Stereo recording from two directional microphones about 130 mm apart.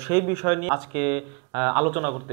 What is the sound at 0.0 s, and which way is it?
Speech, 20° right (ahead or behind).